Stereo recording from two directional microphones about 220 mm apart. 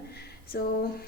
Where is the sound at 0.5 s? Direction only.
45° left (ahead or behind).